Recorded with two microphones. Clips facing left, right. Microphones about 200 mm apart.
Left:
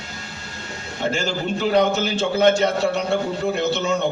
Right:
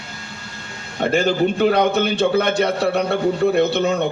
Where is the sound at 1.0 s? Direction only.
60° right (ahead or behind).